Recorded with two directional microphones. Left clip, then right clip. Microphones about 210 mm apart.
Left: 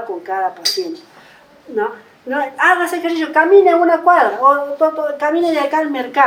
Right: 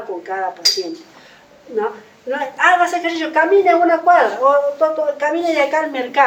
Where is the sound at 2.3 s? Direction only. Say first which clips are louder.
Left 1 dB; 30° left (ahead or behind).